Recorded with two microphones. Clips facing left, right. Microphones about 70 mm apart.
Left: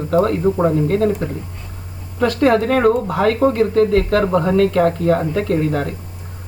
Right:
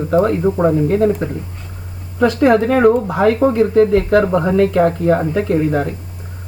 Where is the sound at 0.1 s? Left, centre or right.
Centre.